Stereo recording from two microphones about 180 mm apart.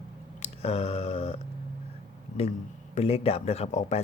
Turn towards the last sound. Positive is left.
turn(degrees=40)  # may be behind; listen again after turning